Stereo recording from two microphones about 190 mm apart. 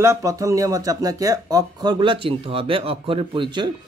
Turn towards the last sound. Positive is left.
turn(degrees=-25)  # may be behind; listen again after turning